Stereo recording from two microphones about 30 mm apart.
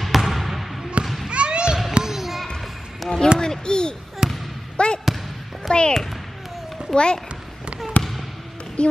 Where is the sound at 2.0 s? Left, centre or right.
Centre.